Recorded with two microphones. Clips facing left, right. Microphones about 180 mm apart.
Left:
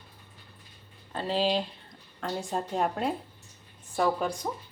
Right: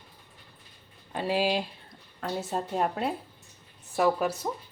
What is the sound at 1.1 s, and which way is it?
Speech, 10° right (ahead or behind).